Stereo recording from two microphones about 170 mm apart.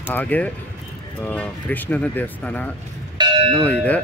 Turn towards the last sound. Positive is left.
turn(degrees=10)  # may be behind; listen again after turning